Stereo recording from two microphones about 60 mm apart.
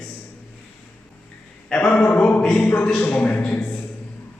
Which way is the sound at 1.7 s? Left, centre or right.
Centre.